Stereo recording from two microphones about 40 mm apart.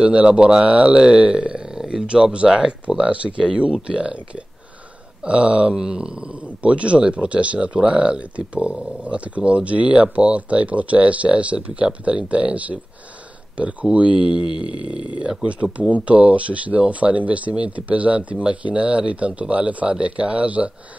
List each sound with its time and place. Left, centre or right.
0.0 s speech: right
0.7 s speech: right; by 3.0 s centre
3.0 s speech: right
5.2 s speech: right